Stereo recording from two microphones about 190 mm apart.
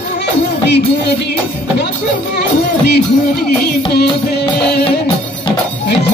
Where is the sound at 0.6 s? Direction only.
60° left (ahead or behind).